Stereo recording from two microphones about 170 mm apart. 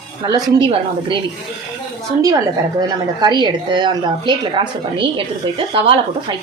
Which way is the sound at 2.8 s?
25° right (ahead or behind).